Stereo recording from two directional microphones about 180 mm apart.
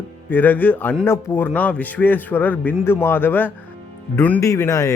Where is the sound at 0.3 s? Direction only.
10° left (ahead or behind).